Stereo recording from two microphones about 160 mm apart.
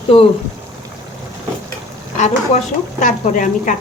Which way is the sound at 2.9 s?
50° left (ahead or behind).